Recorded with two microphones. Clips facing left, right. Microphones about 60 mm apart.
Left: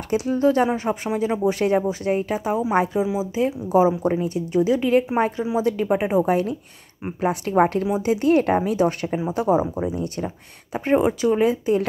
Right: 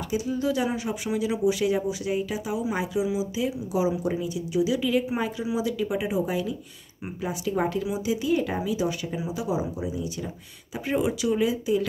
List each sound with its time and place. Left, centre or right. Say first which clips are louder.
0.1 s speech: left 8 dB; left
10.9 s speech: left 6 dB; left